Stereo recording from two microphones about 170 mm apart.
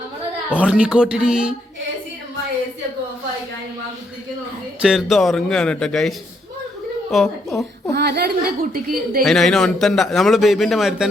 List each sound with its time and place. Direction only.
0.5 s a man's voice: 5° right (ahead or behind)
4.8 s a man's voice: centre (ahead or behind)
7.9 s a woman's voice: 70° right (ahead or behind)
9.2 s a man's voice: centre (ahead or behind)